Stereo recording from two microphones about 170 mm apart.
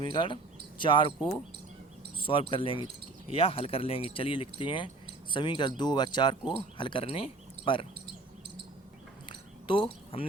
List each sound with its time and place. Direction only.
0.0 s speech: 30° left (ahead or behind)
2.1 s speech: 30° left (ahead or behind)
9.3 s a sound: 30° left (ahead or behind)